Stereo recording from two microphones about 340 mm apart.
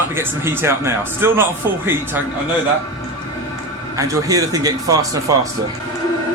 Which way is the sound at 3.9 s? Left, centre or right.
Centre.